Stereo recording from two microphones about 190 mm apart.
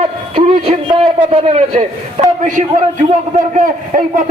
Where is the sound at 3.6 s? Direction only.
45° right (ahead or behind).